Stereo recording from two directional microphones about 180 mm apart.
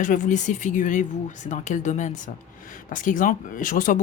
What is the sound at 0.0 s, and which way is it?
Speech, 45° left (ahead or behind).